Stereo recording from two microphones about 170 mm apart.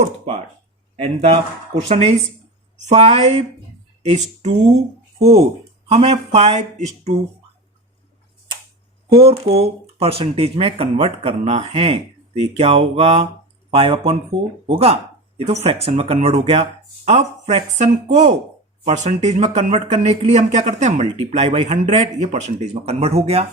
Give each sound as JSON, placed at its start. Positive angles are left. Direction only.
{"t": 0.0, "sound": "speech", "side_deg": -35}
{"t": 5.9, "sound": "speech", "side_deg": -40}
{"t": 9.2, "sound": "speech", "side_deg": -35}